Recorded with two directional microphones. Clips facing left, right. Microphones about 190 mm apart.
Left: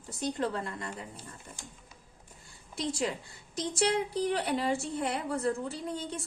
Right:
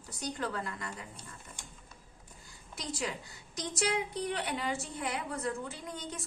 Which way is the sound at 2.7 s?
30° left (ahead or behind).